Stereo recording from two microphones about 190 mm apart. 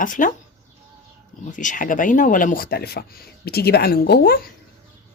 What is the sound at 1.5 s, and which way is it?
Speech, 40° left (ahead or behind).